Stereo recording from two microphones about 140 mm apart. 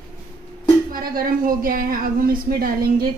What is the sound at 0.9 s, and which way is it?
Speech, 90° right.